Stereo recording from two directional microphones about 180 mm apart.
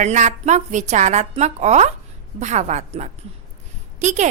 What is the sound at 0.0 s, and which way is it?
A woman's voice, 40° right (ahead or behind).